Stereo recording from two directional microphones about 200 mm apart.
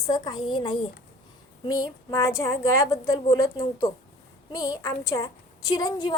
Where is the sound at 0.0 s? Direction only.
20° left (ahead or behind).